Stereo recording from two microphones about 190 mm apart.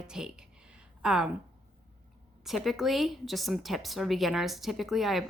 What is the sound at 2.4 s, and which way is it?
A woman's voice, centre (ahead or behind).